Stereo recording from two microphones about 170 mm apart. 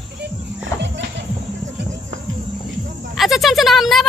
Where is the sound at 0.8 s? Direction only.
90° right.